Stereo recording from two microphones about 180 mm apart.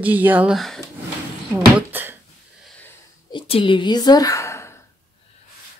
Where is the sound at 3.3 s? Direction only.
30° left (ahead or behind).